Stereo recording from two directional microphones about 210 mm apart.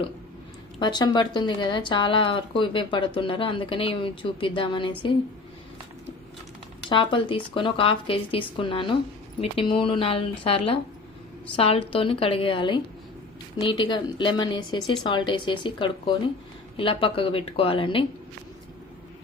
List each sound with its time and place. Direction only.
0.8 s speech: 20° left (ahead or behind)
6.9 s speech: 25° left (ahead or behind)